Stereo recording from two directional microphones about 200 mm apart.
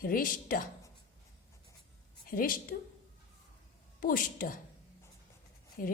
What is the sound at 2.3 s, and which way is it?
Speech, 45° left (ahead or behind).